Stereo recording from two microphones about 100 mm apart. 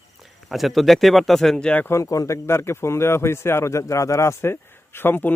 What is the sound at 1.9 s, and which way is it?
A man's voice, 30° left (ahead or behind).